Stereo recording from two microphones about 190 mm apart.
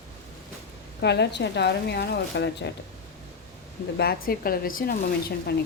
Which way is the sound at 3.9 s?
55° left (ahead or behind).